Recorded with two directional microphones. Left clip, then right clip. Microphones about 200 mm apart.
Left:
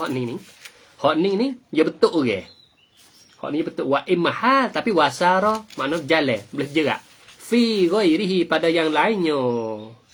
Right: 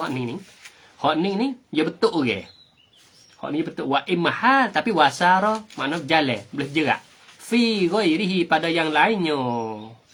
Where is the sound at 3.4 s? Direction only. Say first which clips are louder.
Left 2 dB; 15° right (ahead or behind).